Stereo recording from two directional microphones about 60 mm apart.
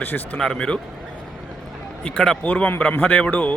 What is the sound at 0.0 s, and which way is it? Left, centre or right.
Speech, left.